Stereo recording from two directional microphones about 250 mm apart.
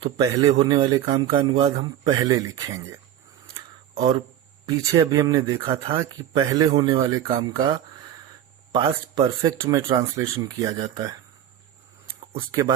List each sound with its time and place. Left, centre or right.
0.0 s speech: centre
4.6 s speech: centre
12.5 s speech: centre